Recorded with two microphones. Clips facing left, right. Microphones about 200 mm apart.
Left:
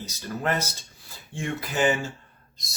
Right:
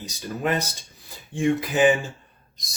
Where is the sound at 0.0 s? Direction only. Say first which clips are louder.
Right 2 dB; 15° right (ahead or behind).